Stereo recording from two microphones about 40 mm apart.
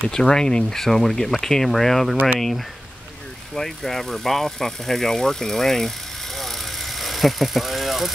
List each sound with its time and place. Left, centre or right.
0.1 s speech: centre
0.7 s speech: centre
3.5 s speech: centre